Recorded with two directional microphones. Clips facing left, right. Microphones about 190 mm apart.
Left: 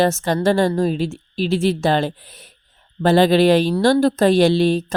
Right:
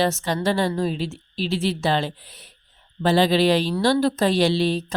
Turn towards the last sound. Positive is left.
turn(degrees=50)  # may be behind; listen again after turning